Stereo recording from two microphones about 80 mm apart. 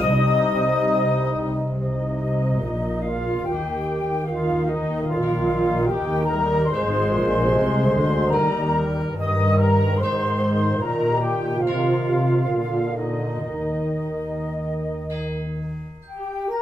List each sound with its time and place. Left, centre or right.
0.2 s music: centre
4.5 s organ: centre
5.5 s music: centre
8.5 s music: left
9.5 s music: centre
11.8 s music: centre